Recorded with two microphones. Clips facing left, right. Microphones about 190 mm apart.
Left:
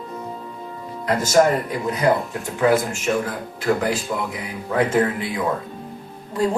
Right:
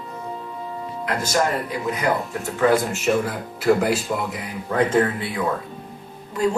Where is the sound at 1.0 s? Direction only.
45° left (ahead or behind).